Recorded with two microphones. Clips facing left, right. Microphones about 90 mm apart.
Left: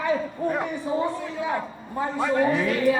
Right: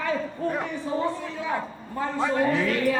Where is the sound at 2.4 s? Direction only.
15° left (ahead or behind).